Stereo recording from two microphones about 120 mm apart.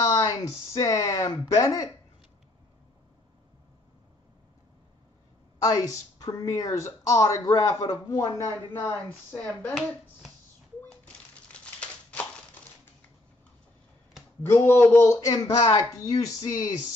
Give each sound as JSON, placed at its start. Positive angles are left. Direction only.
{"t": 0.0, "sound": "a woman's voice", "side_deg": 30}
{"t": 5.6, "sound": "a woman's voice", "side_deg": 30}
{"t": 9.3, "sound": "speech", "side_deg": 15}
{"t": 11.5, "sound": "crumpling", "side_deg": 10}
{"t": 14.4, "sound": "a woman's voice", "side_deg": 20}
{"t": 15.1, "sound": "speech", "side_deg": 40}